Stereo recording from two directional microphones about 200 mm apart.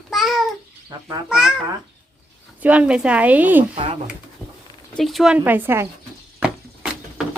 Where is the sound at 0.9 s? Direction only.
15° right (ahead or behind).